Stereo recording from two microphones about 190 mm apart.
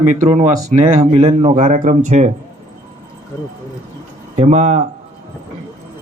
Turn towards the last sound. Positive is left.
turn(degrees=-35)  # may be behind; listen again after turning